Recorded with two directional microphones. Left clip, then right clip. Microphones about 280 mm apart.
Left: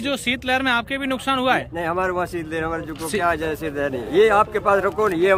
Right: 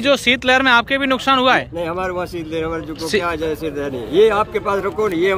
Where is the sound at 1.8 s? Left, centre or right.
Left.